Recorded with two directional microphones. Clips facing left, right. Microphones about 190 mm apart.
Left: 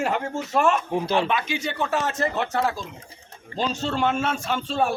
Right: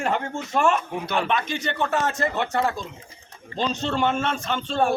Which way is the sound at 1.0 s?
25° left (ahead or behind).